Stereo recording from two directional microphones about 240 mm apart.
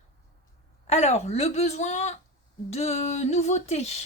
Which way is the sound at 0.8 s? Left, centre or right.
Left.